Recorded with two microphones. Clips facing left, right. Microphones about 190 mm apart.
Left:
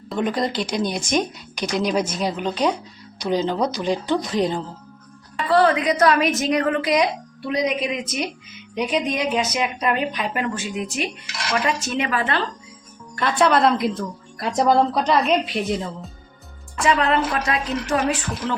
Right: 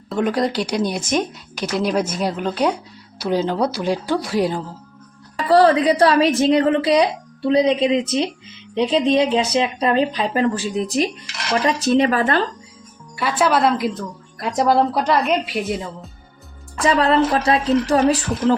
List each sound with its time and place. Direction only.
0.1 s speech: 5° right (ahead or behind)
5.4 s a woman's voice: 35° right (ahead or behind)
13.1 s speech: 5° right (ahead or behind)
16.8 s speech: 35° right (ahead or behind)